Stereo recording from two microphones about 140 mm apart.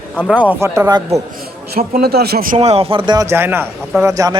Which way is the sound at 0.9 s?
30° right (ahead or behind).